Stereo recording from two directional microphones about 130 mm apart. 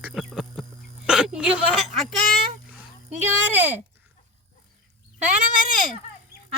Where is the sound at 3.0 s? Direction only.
15° right (ahead or behind).